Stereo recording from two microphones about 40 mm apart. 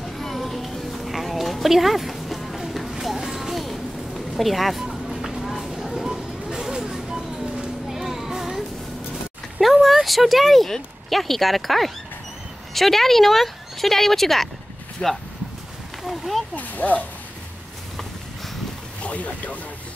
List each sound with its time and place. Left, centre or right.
0.0 s a sound: centre
4.4 s speech: centre
4.8 s a sound: centre
6.0 s a sound: centre
9.1 s speech: centre
15.0 s speech: left
16.0 s speech: centre
16.5 s speech: left
19.0 s speech: left